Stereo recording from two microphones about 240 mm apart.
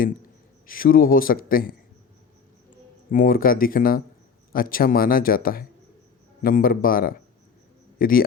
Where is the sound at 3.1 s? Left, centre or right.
Left.